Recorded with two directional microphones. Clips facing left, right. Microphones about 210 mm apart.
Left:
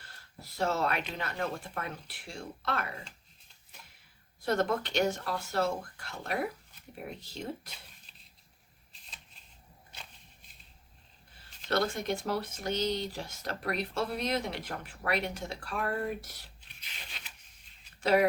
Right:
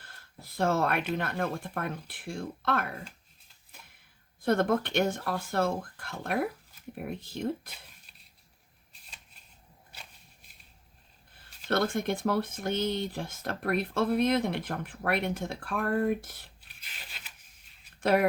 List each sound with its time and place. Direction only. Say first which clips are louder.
0.0 s speech: even; 55° right (ahead or behind)
4.4 s speech: right 4 dB; 55° right (ahead or behind)
11.7 s speech: right 2 dB; 55° right (ahead or behind)
16.6 s a sound: even; 5° right (ahead or behind)
18.0 s speech: right 1 dB; 55° right (ahead or behind)